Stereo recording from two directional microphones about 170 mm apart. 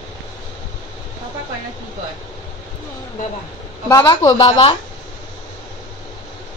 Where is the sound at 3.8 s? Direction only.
25° left (ahead or behind).